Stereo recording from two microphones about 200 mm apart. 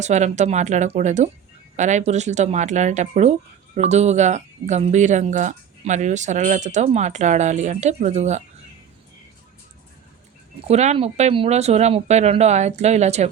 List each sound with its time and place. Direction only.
0.0 s speech: 35° right (ahead or behind)
10.7 s speech: 30° right (ahead or behind)